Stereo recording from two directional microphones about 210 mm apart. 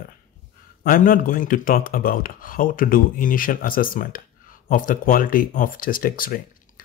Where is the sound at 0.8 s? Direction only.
40° left (ahead or behind).